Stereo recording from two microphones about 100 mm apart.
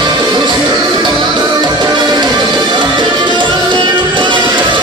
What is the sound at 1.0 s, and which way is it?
Music, 45° right (ahead or behind).